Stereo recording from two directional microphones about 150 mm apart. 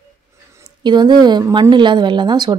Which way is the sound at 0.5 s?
25° right (ahead or behind).